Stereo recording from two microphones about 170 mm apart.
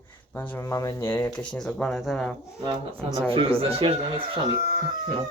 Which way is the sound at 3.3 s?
35° right (ahead or behind).